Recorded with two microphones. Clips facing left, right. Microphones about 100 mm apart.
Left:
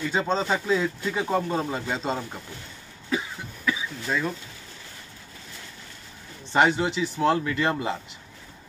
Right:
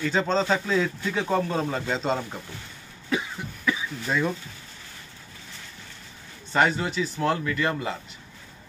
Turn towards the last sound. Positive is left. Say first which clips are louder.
# left 1 dB
turn(degrees=25)  # may be behind; listen again after turning